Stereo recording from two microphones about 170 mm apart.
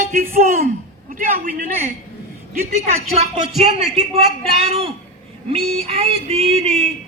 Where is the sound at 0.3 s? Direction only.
55° right (ahead or behind).